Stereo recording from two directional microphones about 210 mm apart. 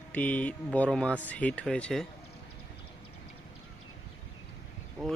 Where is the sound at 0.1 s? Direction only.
5° left (ahead or behind).